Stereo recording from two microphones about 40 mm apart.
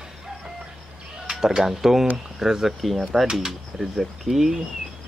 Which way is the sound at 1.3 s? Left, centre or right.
Centre.